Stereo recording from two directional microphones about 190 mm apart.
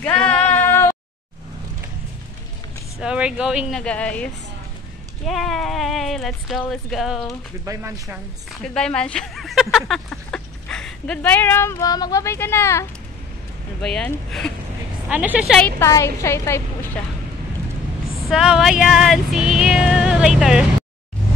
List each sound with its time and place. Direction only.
0.0 s a sound: 5° left (ahead or behind)
3.0 s music: 5° right (ahead or behind)
7.6 s speech: 15° right (ahead or behind)
8.6 s speech: 5° left (ahead or behind)
13.7 s music: 5° left (ahead or behind)
15.0 s music: 5° right (ahead or behind)
15.8 s a woman's voice: 15° left (ahead or behind)
18.3 s music: 5° right (ahead or behind)